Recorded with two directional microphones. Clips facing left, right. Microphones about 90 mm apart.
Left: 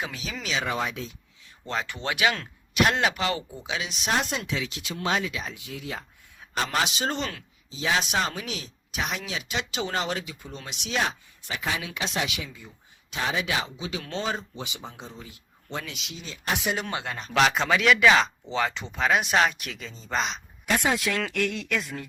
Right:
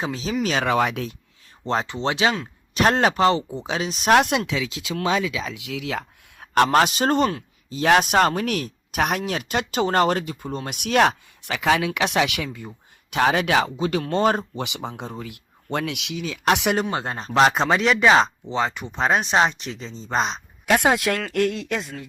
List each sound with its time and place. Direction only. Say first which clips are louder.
0.0 s speech: right 7 dB; 35° right (ahead or behind)
0.6 s speech: right 8 dB; 75° right (ahead or behind)
1.6 s speech: right 7 dB; 30° right (ahead or behind)
2.7 s speech: right 5 dB; 40° right (ahead or behind)
4.1 s speech: right 10 dB; 70° right (ahead or behind)
5.5 s speech: right 7 dB; 90° right; by 12.5 s 70° right (ahead or behind)
12.5 s speech: right 9 dB; 60° right (ahead or behind)
13.7 s speech: right 10 dB; 45° right (ahead or behind); by 16.7 s 85° right
16.9 s speech: right 5 dB; 35° right (ahead or behind)
18.4 s speech: right 3 dB; 15° right (ahead or behind)
18.9 s speech: right 3 dB; 30° right (ahead or behind)
20.7 s speech: right 6 dB; 60° right (ahead or behind)
21.3 s speech: right 5 dB; 40° right (ahead or behind)